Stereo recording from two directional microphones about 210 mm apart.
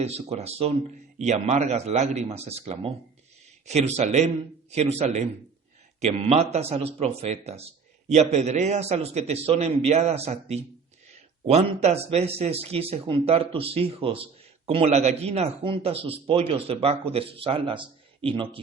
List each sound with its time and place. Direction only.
0.0 s a man's voice: 30° right (ahead or behind)